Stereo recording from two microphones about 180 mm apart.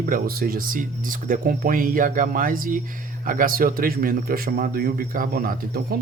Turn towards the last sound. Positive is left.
turn(degrees=-55)  # may be behind; listen again after turning